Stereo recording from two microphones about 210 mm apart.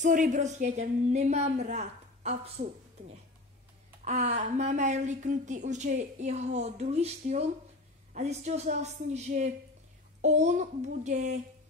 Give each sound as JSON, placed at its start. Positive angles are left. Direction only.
{"t": 0.0, "sound": "speech", "side_deg": -35}